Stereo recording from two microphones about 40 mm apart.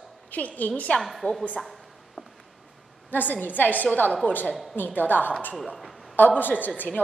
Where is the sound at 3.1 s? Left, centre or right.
Left.